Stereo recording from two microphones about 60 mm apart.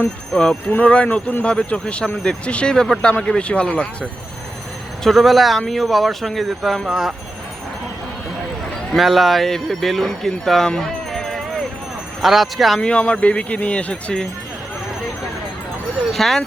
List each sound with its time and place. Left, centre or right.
0.3 s speech: centre
5.0 s speech: centre
8.9 s speech: centre
10.7 s music: centre
12.2 s speech: centre
12.8 s speech: centre
16.1 s speech: centre